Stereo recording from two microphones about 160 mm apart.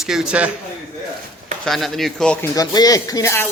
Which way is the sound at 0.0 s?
5° right (ahead or behind).